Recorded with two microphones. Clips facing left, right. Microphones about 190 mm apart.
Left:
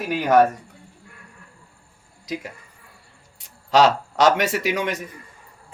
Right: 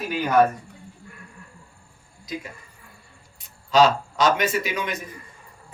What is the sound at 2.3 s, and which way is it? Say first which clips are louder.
A man's voice: left 3 dB; 80° left.